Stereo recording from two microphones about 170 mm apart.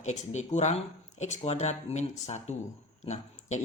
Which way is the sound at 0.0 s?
45° left (ahead or behind).